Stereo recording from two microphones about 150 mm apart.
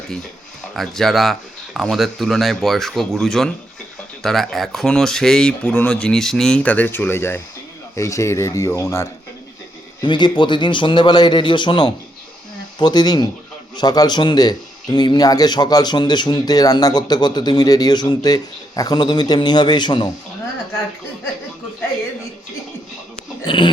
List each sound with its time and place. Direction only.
0.8 s a man's voice: centre (ahead or behind); by 9.0 s 20° left (ahead or behind)
10.0 s a man's voice: 30° left (ahead or behind)
23.5 s a man's voice: 30° left (ahead or behind)